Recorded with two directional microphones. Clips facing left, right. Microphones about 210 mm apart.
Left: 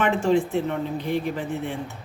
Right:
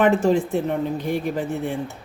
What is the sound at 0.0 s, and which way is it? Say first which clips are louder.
A woman's voice: right 3 dB; 40° right (ahead or behind).